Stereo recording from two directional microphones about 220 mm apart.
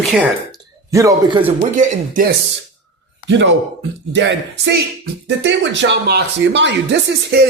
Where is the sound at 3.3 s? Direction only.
55° right (ahead or behind).